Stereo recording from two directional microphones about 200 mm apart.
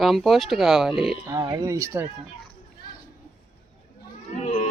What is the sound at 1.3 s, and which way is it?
Speech, 15° right (ahead or behind).